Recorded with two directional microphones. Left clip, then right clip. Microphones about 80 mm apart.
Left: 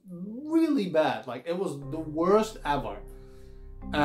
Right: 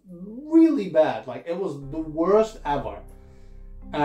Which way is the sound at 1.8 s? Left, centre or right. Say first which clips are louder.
Right 3 dB; left.